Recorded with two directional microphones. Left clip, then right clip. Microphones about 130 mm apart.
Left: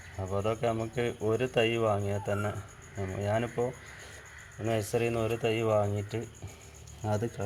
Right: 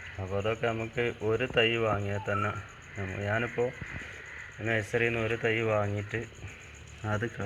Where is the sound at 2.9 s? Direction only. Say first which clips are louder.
Even; 10° left (ahead or behind).